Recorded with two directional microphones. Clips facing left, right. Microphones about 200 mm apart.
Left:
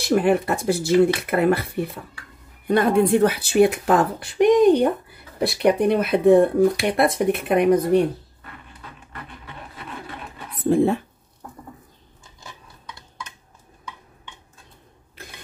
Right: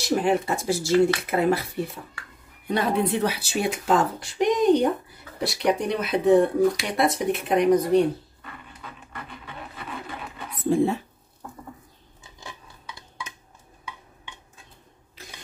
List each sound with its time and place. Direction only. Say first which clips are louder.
0.1 s speech: left 4 dB; 60° left (ahead or behind)
2.7 s speech: left 6 dB; 50° left (ahead or behind)
10.7 s speech: left 3 dB; 60° left (ahead or behind)